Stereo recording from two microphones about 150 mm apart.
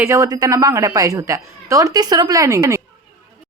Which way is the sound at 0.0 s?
20° right (ahead or behind).